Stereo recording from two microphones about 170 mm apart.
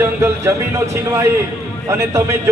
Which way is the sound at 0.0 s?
15° right (ahead or behind).